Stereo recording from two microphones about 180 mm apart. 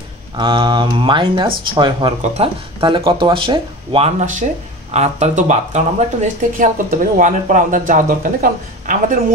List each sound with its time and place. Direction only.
0.4 s speech: 25° right (ahead or behind); by 9.2 s 50° right (ahead or behind)